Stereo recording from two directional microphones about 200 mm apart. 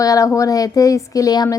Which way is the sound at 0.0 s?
15° left (ahead or behind).